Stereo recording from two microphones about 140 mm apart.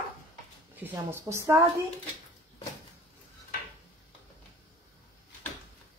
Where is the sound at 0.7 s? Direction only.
15° right (ahead or behind).